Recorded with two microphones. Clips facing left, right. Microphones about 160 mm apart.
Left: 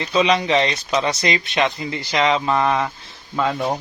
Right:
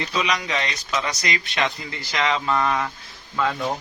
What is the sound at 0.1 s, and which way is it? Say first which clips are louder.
Speech: left 11 dB; 25° left (ahead or behind).